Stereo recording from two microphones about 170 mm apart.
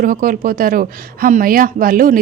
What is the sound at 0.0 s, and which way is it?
Speech, 55° right (ahead or behind).